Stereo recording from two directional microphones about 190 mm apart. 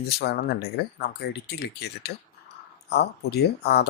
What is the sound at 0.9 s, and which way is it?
Speech, 60° left (ahead or behind).